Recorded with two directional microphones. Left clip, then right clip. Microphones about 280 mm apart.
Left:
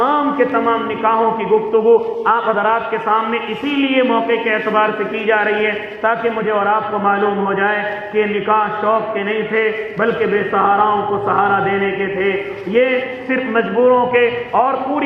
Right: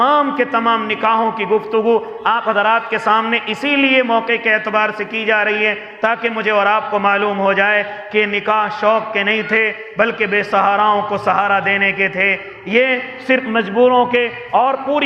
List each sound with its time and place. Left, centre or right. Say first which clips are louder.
0.0 s a man's voice: right 1 dB; right
12.7 s a man's voice: even; right